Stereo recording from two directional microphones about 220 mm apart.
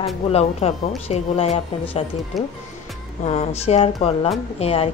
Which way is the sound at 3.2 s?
30° left (ahead or behind).